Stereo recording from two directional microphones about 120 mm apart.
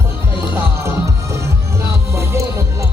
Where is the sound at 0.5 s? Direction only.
20° right (ahead or behind).